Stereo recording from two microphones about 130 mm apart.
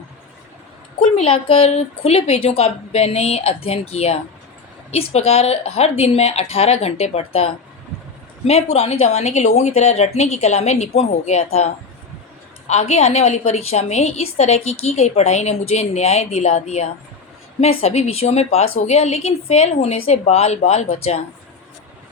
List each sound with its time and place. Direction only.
1.1 s a woman's voice: 45° left (ahead or behind)